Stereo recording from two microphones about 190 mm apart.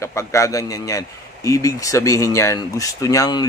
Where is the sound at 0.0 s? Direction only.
15° left (ahead or behind).